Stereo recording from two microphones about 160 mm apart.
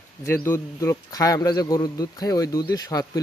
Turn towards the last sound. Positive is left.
turn(degrees=20)  # may be behind; listen again after turning